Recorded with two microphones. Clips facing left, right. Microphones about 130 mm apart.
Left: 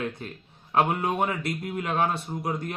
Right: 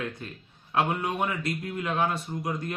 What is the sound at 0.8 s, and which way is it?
A man's voice, 25° left (ahead or behind).